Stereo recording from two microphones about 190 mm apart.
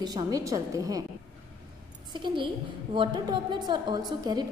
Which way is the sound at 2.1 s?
25° right (ahead or behind).